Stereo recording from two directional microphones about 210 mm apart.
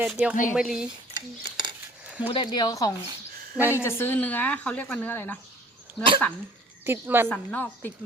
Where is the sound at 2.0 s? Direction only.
5° right (ahead or behind).